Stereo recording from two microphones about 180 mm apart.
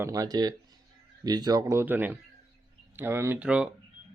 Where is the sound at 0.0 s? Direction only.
20° right (ahead or behind).